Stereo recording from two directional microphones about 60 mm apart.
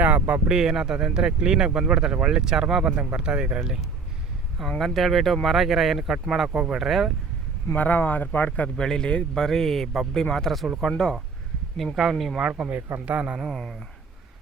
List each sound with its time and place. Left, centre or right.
0.0 s speech: right
0.4 s speech: centre
4.8 s speech: centre
7.8 s speech: left
8.7 s speech: centre
11.9 s speech: centre
12.4 s a man's voice: centre
13.4 s speech: centre